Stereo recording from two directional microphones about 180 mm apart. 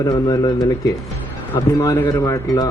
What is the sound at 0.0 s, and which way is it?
A man's voice, 25° left (ahead or behind).